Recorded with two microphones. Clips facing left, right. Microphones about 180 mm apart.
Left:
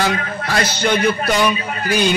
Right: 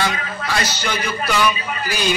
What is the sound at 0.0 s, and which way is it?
A man's voice, 45° left (ahead or behind).